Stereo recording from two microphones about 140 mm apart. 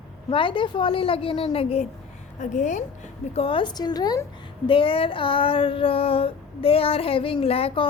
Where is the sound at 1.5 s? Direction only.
45° left (ahead or behind).